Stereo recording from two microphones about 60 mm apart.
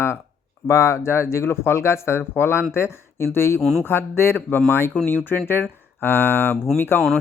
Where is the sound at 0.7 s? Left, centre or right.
Left.